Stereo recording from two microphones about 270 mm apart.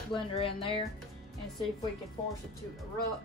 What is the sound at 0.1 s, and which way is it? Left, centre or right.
Speech, centre.